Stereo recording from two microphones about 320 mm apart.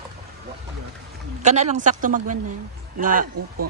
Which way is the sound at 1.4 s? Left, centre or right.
Right.